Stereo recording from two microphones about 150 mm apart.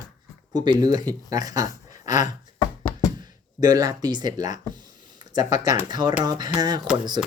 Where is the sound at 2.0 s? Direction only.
55° left (ahead or behind).